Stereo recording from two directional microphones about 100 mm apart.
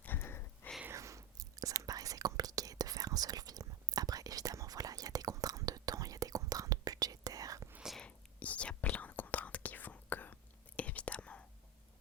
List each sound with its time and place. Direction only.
0.0 s a sound: 20° left (ahead or behind)
0.9 s whispering: 30° right (ahead or behind)
7.9 s whispering: 10° left (ahead or behind)